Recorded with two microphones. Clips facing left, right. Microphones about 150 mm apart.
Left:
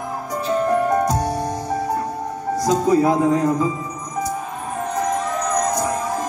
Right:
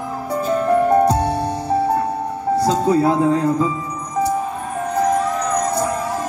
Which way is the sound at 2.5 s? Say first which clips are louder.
Even; 30° right (ahead or behind).